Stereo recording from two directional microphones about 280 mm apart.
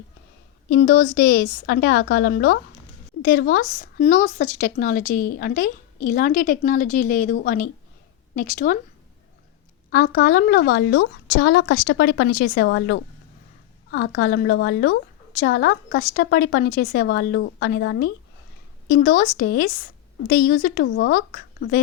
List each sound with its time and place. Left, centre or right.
0.7 s a woman's voice: left
9.9 s a woman's voice: left